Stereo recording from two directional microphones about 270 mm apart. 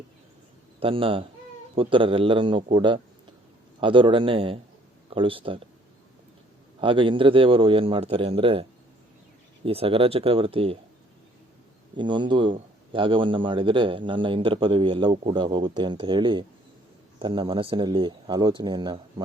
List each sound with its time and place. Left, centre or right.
0.8 s a man's voice: centre
6.7 s a man's voice: centre
9.6 s a man's voice: right
11.9 s a man's voice: centre